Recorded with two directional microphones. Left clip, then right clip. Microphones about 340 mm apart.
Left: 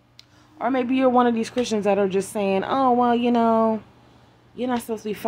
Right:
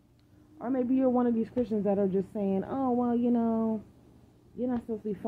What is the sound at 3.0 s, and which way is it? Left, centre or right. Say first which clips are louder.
Speech: left 10 dB; centre.